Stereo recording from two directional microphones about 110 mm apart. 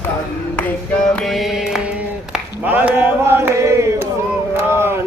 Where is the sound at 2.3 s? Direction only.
15° right (ahead or behind).